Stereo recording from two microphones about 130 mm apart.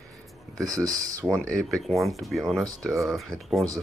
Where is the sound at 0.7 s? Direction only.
25° right (ahead or behind).